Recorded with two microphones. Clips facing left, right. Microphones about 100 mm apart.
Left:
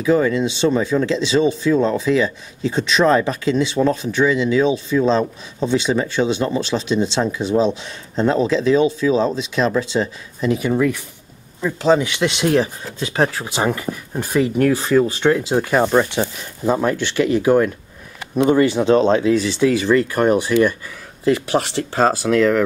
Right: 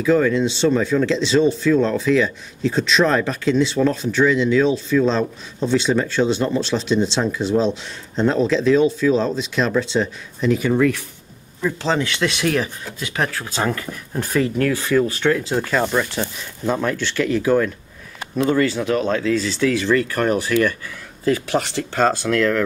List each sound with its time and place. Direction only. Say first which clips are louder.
0.0 s speech: even; 10° left (ahead or behind)
11.6 s speech: left 5 dB; 15° left (ahead or behind)
13.6 s speech: left 3 dB; 15° left (ahead or behind)
16.2 s speech: left 4 dB; 10° left (ahead or behind)
21.2 s speech: left 2 dB; 5° left (ahead or behind)